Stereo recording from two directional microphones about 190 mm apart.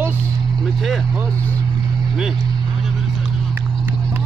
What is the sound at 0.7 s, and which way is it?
Vehicle, centre (ahead or behind).